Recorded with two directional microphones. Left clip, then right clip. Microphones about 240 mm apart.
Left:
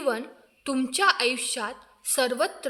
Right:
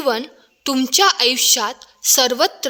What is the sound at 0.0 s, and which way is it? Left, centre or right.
A woman's voice, right.